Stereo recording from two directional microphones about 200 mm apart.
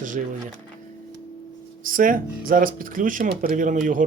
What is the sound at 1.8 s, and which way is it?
Speech, 45° right (ahead or behind).